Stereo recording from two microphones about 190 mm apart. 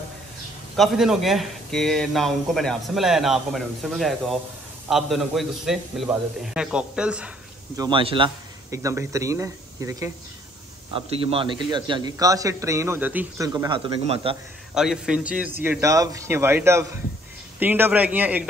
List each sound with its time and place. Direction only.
0.7 s a man's voice: centre (ahead or behind)
7.7 s a man's voice: 25° right (ahead or behind)
8.6 s a man's voice: 15° right (ahead or behind)
10.9 s a man's voice: 30° right (ahead or behind); by 13.5 s 10° right (ahead or behind)
13.5 s a man's voice: 20° right (ahead or behind)
14.0 s speech: 30° right (ahead or behind)
14.7 s a man's voice: 5° right (ahead or behind)